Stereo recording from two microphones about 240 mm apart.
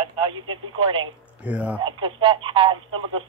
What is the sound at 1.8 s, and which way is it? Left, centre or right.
Speech, right.